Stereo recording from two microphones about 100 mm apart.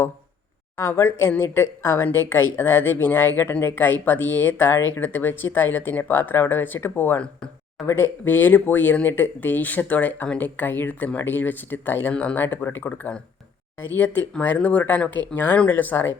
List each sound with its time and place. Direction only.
0.8 s speech: 25° left (ahead or behind)